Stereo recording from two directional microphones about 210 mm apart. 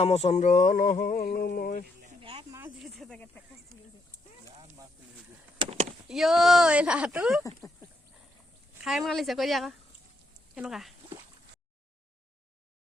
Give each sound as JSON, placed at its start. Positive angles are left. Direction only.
{"t": 0.0, "sound": "a sound", "side_deg": 30}
{"t": 2.0, "sound": "snake", "side_deg": -25}
{"t": 2.7, "sound": "speech", "side_deg": 0}
{"t": 5.5, "sound": "speech", "side_deg": -30}
{"t": 6.1, "sound": "speech", "side_deg": 0}
{"t": 8.8, "sound": "speech", "side_deg": 0}